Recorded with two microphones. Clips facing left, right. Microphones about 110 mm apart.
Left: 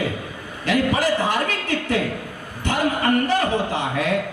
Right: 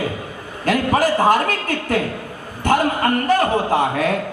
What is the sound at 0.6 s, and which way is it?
A man's voice, 45° right (ahead or behind).